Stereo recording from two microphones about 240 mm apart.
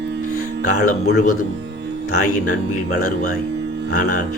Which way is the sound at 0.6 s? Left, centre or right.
Left.